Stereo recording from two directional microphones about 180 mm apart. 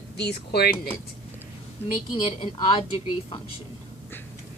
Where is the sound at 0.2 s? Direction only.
65° left (ahead or behind).